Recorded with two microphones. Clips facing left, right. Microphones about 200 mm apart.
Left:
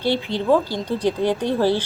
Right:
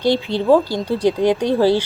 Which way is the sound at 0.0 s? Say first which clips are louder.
Right 4 dB; 15° right (ahead or behind).